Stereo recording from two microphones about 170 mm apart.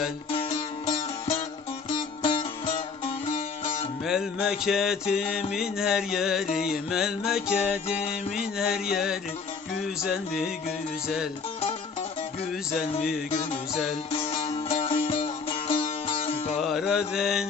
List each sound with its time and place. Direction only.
0.3 s music: 30° left (ahead or behind)
4.0 s mantra: 5° right (ahead or behind)
14.1 s music: 35° left (ahead or behind)
16.6 s mantra: centre (ahead or behind)